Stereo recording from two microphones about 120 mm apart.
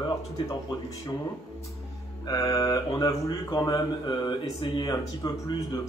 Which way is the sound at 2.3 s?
30° left (ahead or behind).